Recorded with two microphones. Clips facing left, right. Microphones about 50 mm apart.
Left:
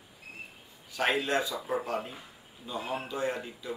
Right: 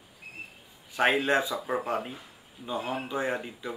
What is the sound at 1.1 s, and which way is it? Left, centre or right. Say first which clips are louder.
Speech: right 4 dB; right.